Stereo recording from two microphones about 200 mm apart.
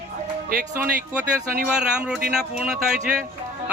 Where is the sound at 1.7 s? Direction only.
5° right (ahead or behind).